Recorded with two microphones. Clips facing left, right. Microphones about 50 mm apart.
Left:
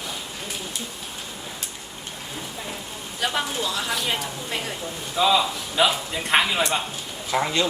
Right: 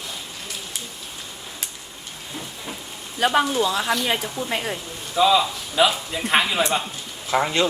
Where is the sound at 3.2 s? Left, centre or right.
Right.